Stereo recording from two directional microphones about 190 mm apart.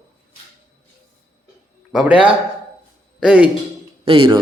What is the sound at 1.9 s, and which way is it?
Speech, 5° right (ahead or behind).